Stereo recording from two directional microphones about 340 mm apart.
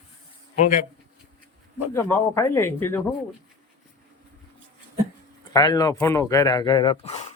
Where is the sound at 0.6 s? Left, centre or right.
Left.